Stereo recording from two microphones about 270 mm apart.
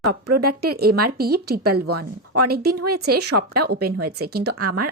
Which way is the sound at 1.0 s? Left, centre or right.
Right.